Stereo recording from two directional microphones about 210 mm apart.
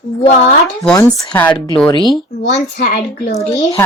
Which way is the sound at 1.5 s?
20° left (ahead or behind).